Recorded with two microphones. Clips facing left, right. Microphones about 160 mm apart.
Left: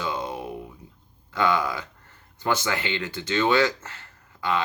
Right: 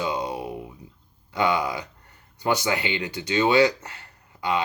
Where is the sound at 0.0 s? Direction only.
15° right (ahead or behind).